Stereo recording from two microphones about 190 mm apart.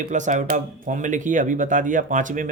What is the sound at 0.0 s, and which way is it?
Speech, 40° right (ahead or behind).